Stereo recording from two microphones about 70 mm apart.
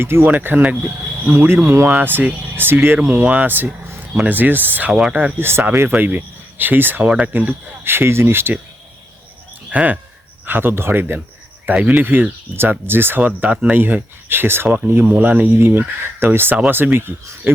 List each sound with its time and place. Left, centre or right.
0.0 s speech: right
0.3 s speech: right
1.3 s speech: right
3.0 s speech: right
4.9 s speech: centre
5.4 s speech: right
5.9 s speech: right
9.7 s speech: right
11.6 s speech: right
15.5 s speech: right